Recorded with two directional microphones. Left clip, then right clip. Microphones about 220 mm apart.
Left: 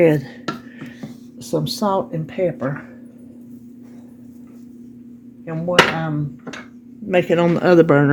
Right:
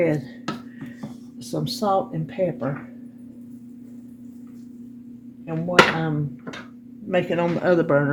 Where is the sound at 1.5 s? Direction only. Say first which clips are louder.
Left 3 dB; 45° left (ahead or behind).